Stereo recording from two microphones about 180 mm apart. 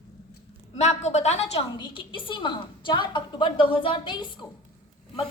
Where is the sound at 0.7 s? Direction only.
40° left (ahead or behind).